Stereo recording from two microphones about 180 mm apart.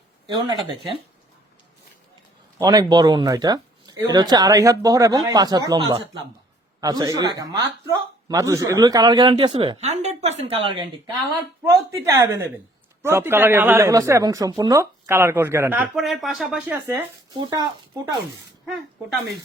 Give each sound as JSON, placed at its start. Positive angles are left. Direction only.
{"t": 0.3, "sound": "speech", "side_deg": -25}
{"t": 2.6, "sound": "speech", "side_deg": -20}
{"t": 11.9, "sound": "speech", "side_deg": -15}
{"t": 16.0, "sound": "speech", "side_deg": 0}
{"t": 16.8, "sound": "speech", "side_deg": -15}
{"t": 17.3, "sound": "speech", "side_deg": -25}